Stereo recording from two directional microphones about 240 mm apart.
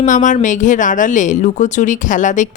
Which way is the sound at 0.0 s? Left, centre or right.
Left.